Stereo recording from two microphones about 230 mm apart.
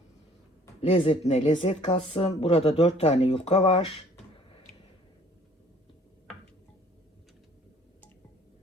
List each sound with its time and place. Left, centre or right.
0.8 s speech: left